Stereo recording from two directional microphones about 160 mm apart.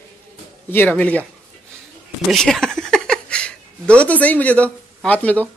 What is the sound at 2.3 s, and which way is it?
Speech, 5° left (ahead or behind).